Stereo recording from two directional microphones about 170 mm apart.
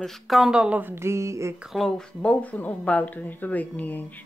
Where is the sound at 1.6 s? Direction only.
Centre (ahead or behind).